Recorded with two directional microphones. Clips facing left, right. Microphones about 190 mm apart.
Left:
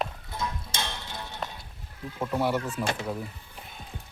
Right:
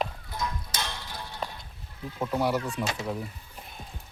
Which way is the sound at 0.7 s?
25° left (ahead or behind).